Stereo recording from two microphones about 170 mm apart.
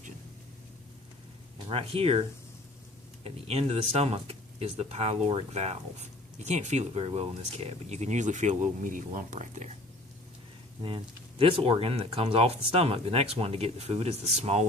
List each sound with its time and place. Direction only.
1.6 s speech: 35° right (ahead or behind)
3.2 s speech: 35° right (ahead or behind)
10.8 s speech: 30° right (ahead or behind)